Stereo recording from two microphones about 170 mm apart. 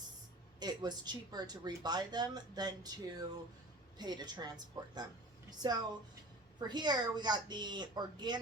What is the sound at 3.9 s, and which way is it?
A woman's voice, 25° right (ahead or behind).